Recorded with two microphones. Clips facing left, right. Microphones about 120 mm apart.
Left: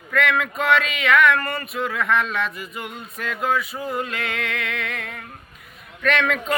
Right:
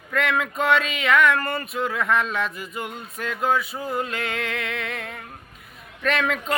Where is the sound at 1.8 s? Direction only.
30° right (ahead or behind).